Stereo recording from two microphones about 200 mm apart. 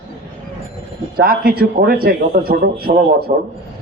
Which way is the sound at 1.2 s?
50° right (ahead or behind).